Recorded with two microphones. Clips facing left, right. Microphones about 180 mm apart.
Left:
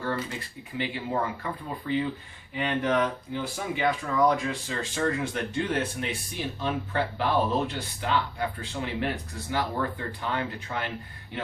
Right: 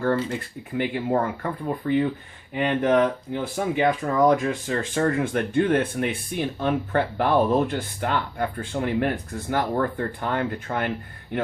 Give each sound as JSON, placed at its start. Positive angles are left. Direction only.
{"t": 0.0, "sound": "speech", "side_deg": -50}